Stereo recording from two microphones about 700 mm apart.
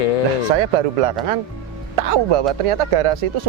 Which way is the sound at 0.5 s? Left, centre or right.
Right.